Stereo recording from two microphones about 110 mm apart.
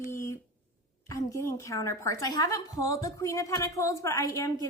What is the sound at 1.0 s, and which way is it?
A woman's voice, 30° left (ahead or behind).